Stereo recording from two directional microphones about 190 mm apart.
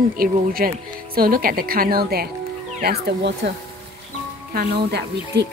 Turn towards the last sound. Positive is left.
turn(degrees=-60)  # may be behind; listen again after turning